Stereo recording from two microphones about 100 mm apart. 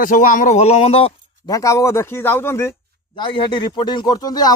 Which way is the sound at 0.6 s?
90° left.